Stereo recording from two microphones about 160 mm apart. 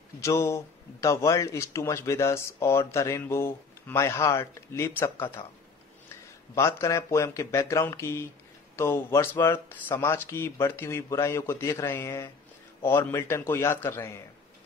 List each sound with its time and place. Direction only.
0.2 s a man's voice: 20° left (ahead or behind)
6.5 s a man's voice: 20° left (ahead or behind)